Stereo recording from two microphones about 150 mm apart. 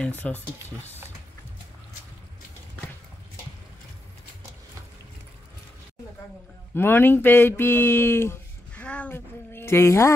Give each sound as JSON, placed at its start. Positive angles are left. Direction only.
{"t": 0.0, "sound": "speech", "side_deg": 10}
{"t": 6.7, "sound": "speech", "side_deg": 15}